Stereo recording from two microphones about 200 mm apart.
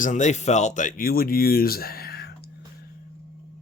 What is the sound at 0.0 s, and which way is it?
Speech, 40° left (ahead or behind).